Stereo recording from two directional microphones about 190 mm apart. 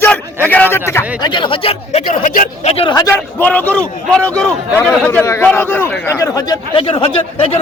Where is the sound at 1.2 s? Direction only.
25° left (ahead or behind).